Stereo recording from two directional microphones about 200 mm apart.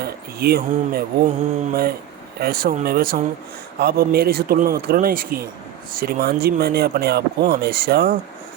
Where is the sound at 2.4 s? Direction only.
50° right (ahead or behind).